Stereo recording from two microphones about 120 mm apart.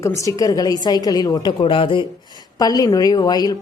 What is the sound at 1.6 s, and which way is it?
Speech, 45° left (ahead or behind).